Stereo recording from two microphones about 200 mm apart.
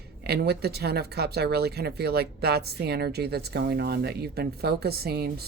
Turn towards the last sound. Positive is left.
turn(degrees=-50)  # may be behind; listen again after turning